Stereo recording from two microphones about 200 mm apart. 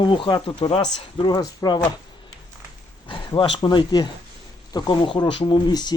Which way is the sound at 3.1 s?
25° left (ahead or behind).